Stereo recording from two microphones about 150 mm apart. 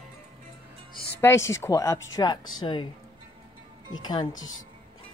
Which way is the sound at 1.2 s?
15° left (ahead or behind).